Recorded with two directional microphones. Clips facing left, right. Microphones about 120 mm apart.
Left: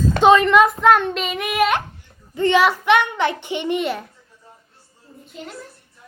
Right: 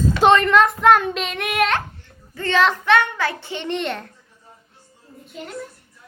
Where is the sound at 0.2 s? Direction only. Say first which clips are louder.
Left 2 dB; centre (ahead or behind).